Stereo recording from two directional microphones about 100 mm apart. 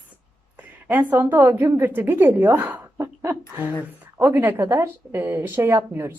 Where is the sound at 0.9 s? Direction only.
20° right (ahead or behind).